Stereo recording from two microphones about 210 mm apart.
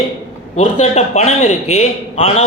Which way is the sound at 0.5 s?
30° left (ahead or behind).